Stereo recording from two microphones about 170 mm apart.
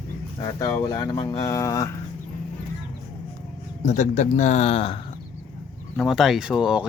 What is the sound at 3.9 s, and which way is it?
Speech, 45° left (ahead or behind).